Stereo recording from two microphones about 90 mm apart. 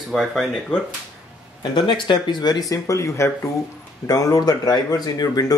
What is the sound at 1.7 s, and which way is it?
Speech, 65° left (ahead or behind).